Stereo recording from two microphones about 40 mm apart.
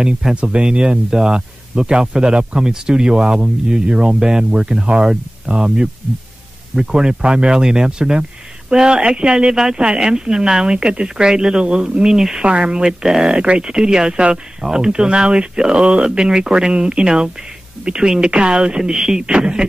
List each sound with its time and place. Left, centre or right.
0.0 s speech: centre
12.4 s speech: right
13.0 s speech: centre
13.3 s speech: right